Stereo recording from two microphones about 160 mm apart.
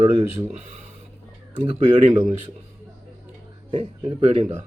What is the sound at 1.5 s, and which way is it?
Speech, 35° right (ahead or behind).